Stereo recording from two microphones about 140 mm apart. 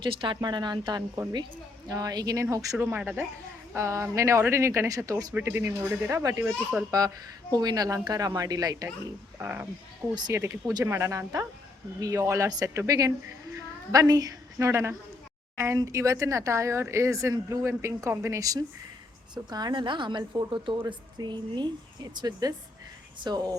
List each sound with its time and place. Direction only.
0.0 s a woman's voice: 35° right (ahead or behind)
2.8 s speech: 10° right (ahead or behind)
3.8 s speech: 20° right (ahead or behind)
7.5 s speech: 30° right (ahead or behind)
9.4 s speech: 10° right (ahead or behind)
10.2 s a woman's voice: 30° right (ahead or behind)